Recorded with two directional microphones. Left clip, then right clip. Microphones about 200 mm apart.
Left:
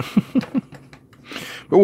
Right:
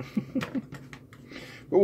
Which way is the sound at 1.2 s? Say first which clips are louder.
Left 10 dB; 50° left (ahead or behind).